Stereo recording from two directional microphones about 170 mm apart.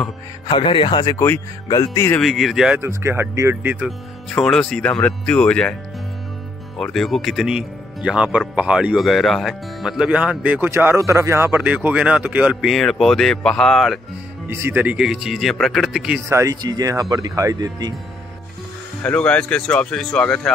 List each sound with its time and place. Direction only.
0.5 s speech: 30° left (ahead or behind)
2.1 s speech: centre (ahead or behind)
2.8 s speech: 15° right (ahead or behind)
4.4 s speech: centre (ahead or behind)
6.8 s speech: centre (ahead or behind)
14.5 s speech: 15° right (ahead or behind)
16.3 s speech: 20° right (ahead or behind)
19.0 s speech: 5° left (ahead or behind)